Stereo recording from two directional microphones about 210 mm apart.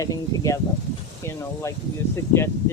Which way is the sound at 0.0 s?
15° left (ahead or behind).